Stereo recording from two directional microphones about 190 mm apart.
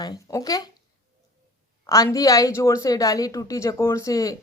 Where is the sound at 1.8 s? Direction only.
20° left (ahead or behind).